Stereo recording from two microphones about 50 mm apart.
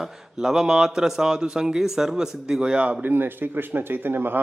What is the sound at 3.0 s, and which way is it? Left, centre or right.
Speech, right.